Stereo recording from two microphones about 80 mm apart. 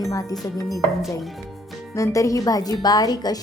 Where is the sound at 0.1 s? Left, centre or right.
Left.